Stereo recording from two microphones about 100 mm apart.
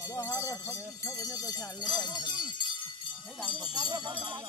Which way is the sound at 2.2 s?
50° left (ahead or behind).